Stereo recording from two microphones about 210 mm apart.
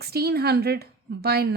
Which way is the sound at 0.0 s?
50° right (ahead or behind).